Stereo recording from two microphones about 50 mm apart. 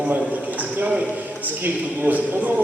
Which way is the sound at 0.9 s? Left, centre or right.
Right.